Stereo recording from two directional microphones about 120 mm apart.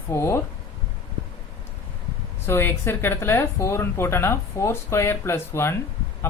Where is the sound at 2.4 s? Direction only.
20° left (ahead or behind).